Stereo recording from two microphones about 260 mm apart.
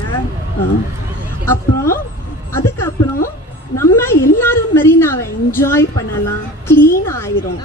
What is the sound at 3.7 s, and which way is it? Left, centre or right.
A woman's voice, centre.